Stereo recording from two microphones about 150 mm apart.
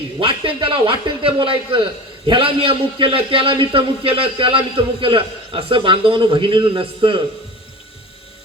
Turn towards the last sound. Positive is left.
turn(degrees=-35)  # may be behind; listen again after turning